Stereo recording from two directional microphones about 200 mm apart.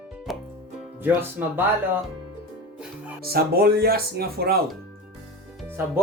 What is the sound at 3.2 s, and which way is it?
Speech, 50° right (ahead or behind).